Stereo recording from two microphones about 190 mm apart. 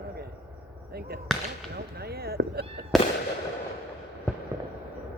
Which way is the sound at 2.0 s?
55° right (ahead or behind).